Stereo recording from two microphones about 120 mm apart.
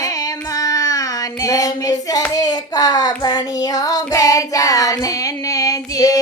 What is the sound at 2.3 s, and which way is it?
Hands, 35° left (ahead or behind).